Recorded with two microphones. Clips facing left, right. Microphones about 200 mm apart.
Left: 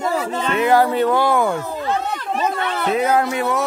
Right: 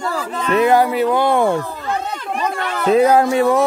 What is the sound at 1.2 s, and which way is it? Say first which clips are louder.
Speech: right 2 dB; 25° right (ahead or behind).